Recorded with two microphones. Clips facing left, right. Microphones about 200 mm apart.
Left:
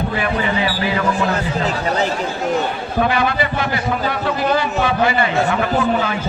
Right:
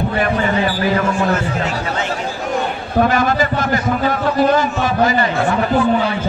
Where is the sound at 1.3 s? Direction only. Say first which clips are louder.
Right 1 dB; 35° left (ahead or behind).